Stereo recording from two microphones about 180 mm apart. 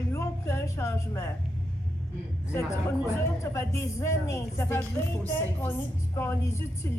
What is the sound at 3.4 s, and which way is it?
A woman's voice, 15° left (ahead or behind).